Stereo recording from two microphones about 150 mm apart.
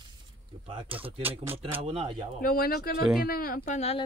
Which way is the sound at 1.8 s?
45° right (ahead or behind).